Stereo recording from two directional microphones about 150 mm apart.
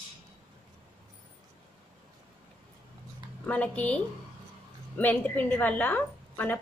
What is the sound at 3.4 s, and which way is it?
A woman's voice, 10° left (ahead or behind).